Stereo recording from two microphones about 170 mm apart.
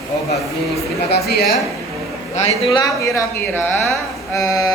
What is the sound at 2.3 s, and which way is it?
Speech, 40° left (ahead or behind).